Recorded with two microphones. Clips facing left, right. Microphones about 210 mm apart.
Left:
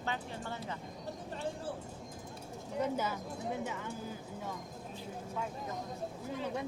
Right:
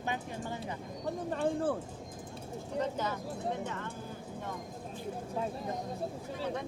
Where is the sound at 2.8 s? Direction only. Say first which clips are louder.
Left 2 dB; 10° left (ahead or behind).